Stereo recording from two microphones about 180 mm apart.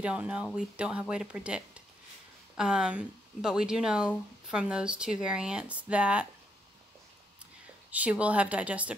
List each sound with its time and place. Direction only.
0.0 s a woman's voice: 5° right (ahead or behind)
7.9 s a woman's voice: 10° right (ahead or behind)